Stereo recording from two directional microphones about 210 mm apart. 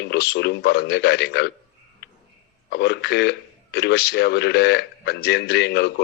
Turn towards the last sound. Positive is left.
turn(degrees=55)  # may be behind; listen again after turning